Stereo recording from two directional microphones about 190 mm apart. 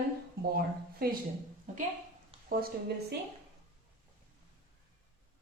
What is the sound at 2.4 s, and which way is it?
Speech, 50° right (ahead or behind).